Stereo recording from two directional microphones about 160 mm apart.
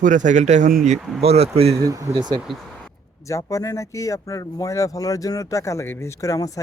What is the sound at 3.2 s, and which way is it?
Speech, 20° left (ahead or behind).